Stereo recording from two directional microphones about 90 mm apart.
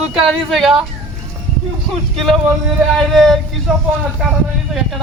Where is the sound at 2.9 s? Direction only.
Centre (ahead or behind).